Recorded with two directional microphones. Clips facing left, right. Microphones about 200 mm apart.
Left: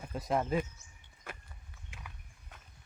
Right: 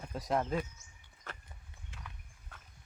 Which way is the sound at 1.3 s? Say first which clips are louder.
Left 2 dB; 10° left (ahead or behind).